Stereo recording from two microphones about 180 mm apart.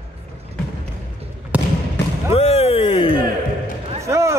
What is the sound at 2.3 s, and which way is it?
Music, 35° left (ahead or behind).